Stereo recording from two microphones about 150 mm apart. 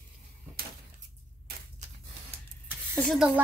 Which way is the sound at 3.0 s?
Centre (ahead or behind).